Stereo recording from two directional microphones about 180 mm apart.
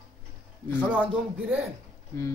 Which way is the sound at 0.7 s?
5° right (ahead or behind).